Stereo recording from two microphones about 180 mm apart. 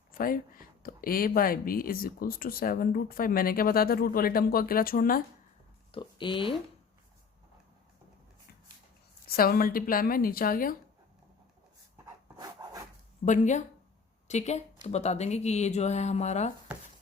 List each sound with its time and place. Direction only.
0.1 s speech: 50° left (ahead or behind)
5.9 s speech: 25° left (ahead or behind)
9.2 s speech: 55° left (ahead or behind)
12.0 s dog: 20° right (ahead or behind)
13.2 s speech: 45° left (ahead or behind)